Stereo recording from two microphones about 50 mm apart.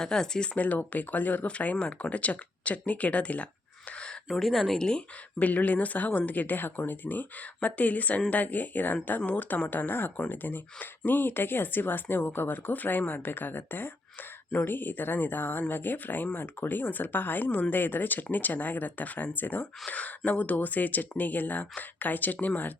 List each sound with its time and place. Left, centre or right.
0.0 s speech: centre
0.5 s speech: left
4.3 s speech: centre
4.8 s speech: centre
5.4 s speech: left